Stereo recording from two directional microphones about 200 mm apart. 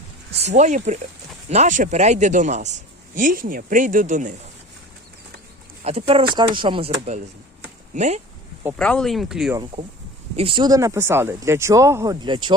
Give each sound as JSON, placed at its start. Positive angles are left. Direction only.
{"t": 0.3, "sound": "a man's voice", "side_deg": -35}
{"t": 5.8, "sound": "a man's voice", "side_deg": -30}
{"t": 8.7, "sound": "speech", "side_deg": 5}
{"t": 10.3, "sound": "speech", "side_deg": -25}